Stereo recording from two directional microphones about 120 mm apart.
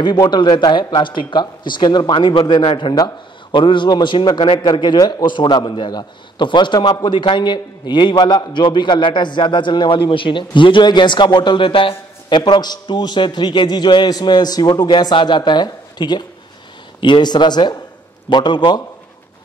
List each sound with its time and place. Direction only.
0.0 s a man's voice: 35° left (ahead or behind)